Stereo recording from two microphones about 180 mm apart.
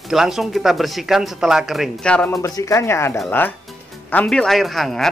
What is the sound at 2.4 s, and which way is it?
Speech, 15° left (ahead or behind).